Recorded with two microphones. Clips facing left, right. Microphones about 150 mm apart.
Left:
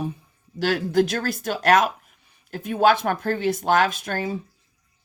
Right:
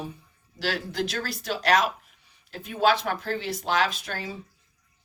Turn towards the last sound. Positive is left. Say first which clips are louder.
# left 5 dB
turn(degrees=50)  # may be behind; listen again after turning